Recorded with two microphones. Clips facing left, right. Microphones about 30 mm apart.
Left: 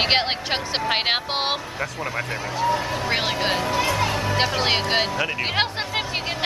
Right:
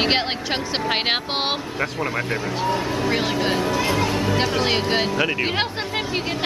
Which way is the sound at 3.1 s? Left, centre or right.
Centre.